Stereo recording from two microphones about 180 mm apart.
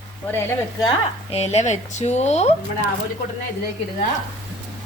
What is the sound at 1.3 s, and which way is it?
A woman's voice, 35° left (ahead or behind).